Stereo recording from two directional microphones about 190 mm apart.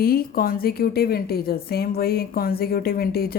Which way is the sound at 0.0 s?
50° left (ahead or behind).